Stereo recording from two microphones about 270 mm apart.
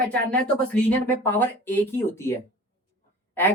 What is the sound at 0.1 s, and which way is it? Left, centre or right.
Speech, centre.